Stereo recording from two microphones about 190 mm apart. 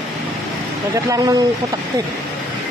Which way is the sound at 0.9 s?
15° right (ahead or behind).